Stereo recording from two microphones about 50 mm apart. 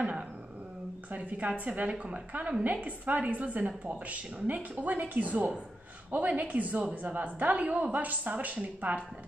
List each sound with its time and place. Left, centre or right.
1.1 s a woman's voice: right